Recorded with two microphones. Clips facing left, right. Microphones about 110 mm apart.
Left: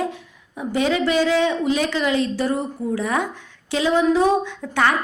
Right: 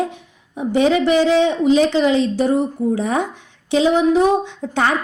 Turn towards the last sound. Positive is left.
turn(degrees=-20)  # may be behind; listen again after turning